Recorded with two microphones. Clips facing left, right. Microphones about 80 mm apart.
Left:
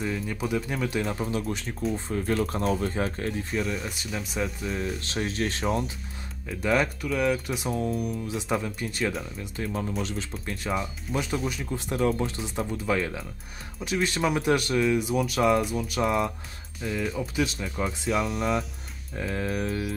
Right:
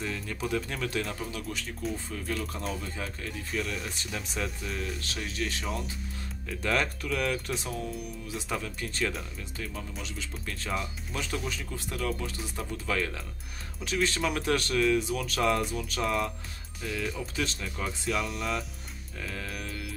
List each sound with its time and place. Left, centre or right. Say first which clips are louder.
0.0 s speech: left 4 dB; centre
1.1 s speech: left 7 dB; left
2.0 s speech: left 8 dB; left
3.5 s speech: left 4 dB; centre
5.2 s speech: left 7 dB; left
6.6 s speech: left 5 dB; centre
7.7 s speech: left 7 dB; left
8.3 s speech: left 6 dB; left
9.6 s speech: left 8 dB; left
10.4 s speech: left 3 dB; centre
11.7 s speech: left 9 dB; left
18.1 s speech: left 6 dB; centre
19.1 s speech: left 9 dB; left